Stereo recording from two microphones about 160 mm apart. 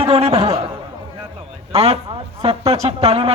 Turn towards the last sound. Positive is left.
turn(degrees=-35)  # may be behind; listen again after turning